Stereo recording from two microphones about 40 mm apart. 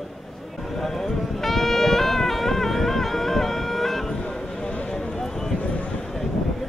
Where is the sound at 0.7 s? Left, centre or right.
Centre.